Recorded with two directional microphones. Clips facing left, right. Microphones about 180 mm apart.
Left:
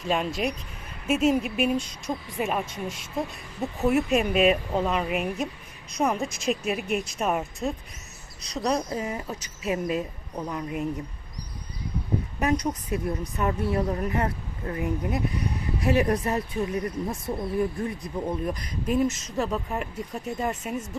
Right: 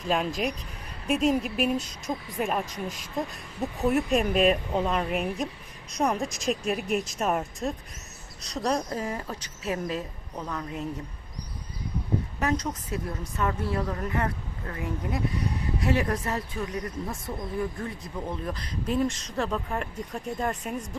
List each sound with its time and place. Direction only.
0.1 s speech: centre (ahead or behind)
12.4 s a woman's voice: 15° left (ahead or behind)